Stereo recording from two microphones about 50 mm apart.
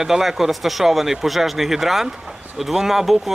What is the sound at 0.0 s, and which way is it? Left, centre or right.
Speech, centre.